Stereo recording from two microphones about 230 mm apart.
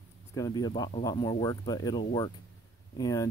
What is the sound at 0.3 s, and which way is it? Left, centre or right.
Speech, centre.